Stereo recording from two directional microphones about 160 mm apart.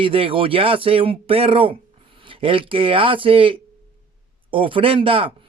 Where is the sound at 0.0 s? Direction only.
35° right (ahead or behind).